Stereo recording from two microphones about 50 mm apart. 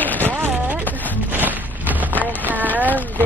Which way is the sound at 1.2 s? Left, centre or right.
Right.